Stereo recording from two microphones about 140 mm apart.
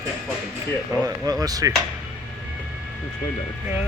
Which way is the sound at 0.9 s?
25° right (ahead or behind).